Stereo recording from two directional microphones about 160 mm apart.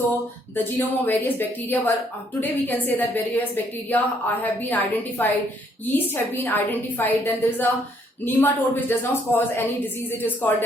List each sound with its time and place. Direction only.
0.5 s a woman's voice: 10° left (ahead or behind)